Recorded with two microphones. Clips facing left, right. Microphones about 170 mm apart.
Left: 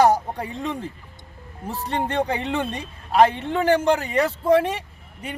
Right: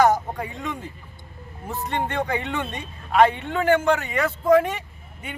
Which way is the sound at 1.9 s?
35° left (ahead or behind).